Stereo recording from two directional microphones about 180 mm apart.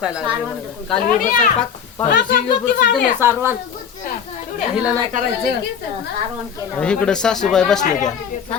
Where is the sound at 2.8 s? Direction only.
65° left (ahead or behind).